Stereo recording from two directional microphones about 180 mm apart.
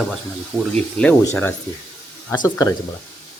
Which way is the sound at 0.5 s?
5° left (ahead or behind).